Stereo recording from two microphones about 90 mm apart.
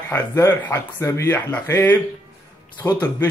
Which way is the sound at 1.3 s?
20° left (ahead or behind).